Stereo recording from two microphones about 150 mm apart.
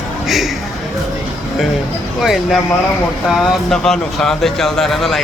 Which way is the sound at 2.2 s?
Centre (ahead or behind).